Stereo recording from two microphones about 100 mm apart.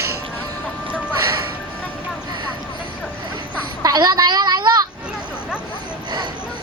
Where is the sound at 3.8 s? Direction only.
40° right (ahead or behind).